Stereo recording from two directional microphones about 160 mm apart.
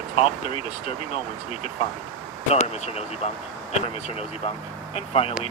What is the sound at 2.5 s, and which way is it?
Speech, 40° left (ahead or behind).